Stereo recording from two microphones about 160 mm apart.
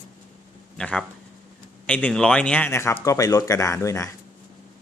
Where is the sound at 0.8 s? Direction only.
5° left (ahead or behind).